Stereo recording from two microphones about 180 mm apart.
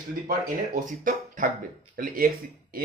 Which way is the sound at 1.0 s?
45° right (ahead or behind).